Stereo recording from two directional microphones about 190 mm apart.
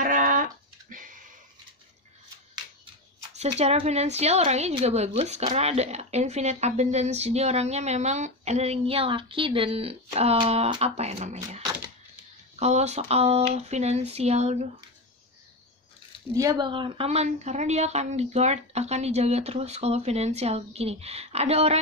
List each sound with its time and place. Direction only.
0.0 s a sound: 45° right (ahead or behind)
3.5 s speech: 35° right (ahead or behind)
16.3 s speech: 20° right (ahead or behind)